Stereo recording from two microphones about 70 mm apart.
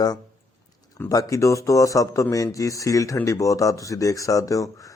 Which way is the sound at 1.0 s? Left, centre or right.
Left.